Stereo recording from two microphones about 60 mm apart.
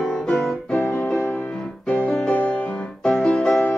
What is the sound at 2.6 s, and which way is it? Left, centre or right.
Music, centre.